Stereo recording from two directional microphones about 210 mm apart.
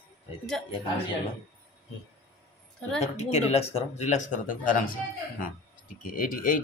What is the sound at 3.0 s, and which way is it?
Speech, 30° left (ahead or behind).